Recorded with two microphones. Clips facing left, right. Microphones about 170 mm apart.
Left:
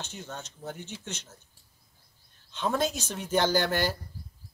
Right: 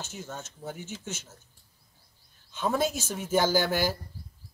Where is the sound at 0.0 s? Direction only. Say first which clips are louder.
Right 1 dB; 5° right (ahead or behind).